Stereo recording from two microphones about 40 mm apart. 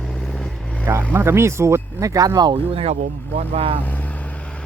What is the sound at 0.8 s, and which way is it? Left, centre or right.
Speech, right.